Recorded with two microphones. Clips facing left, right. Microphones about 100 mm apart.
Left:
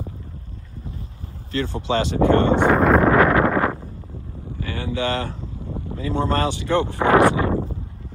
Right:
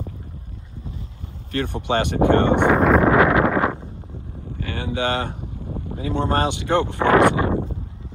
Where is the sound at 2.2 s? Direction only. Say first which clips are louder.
Even; 20° right (ahead or behind).